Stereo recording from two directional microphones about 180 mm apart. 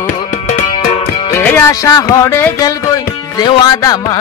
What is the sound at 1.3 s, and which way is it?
A man's voice, 15° left (ahead or behind).